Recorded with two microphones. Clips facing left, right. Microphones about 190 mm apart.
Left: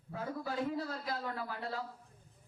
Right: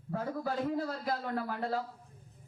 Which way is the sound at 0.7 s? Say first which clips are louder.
Right 4 dB; 50° right (ahead or behind).